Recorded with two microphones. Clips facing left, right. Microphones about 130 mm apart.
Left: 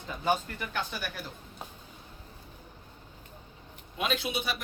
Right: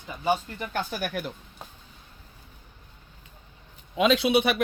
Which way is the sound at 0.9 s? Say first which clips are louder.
Right 7 dB; 60° right (ahead or behind).